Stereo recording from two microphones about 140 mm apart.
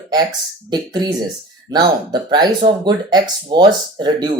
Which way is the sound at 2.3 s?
30° right (ahead or behind).